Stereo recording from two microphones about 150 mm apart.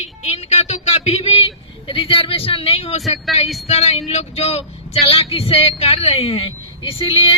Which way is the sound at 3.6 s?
45° left (ahead or behind).